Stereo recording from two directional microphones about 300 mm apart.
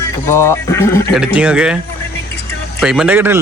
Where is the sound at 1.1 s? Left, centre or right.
Centre.